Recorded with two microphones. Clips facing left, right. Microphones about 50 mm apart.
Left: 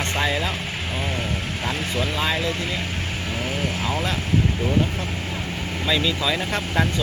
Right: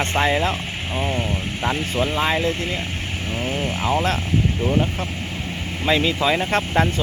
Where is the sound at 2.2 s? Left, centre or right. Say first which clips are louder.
Right 3 dB; right.